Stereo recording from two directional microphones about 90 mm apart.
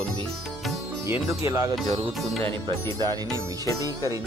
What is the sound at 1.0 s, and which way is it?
Music, 30° right (ahead or behind).